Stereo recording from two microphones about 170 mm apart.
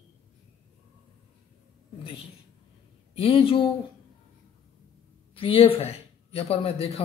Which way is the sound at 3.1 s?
35° left (ahead or behind).